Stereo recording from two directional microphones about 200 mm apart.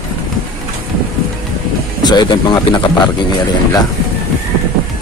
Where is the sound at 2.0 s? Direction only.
20° left (ahead or behind).